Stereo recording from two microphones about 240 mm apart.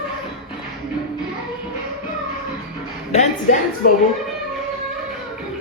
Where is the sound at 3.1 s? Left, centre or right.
Left.